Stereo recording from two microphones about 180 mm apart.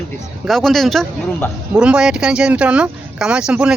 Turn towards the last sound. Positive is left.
turn(degrees=-5)  # may be behind; listen again after turning